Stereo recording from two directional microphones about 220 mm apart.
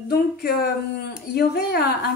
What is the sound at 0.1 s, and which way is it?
A woman's voice, 45° left (ahead or behind).